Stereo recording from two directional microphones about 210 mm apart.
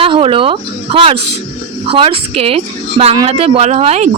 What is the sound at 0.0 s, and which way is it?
Speech, 25° right (ahead or behind).